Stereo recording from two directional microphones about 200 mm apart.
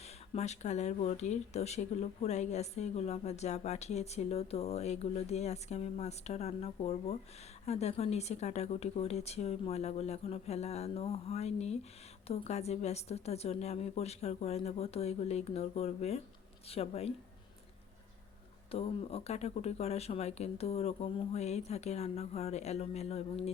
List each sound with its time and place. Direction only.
0.3 s speech: 35° left (ahead or behind)
18.7 s speech: 30° left (ahead or behind)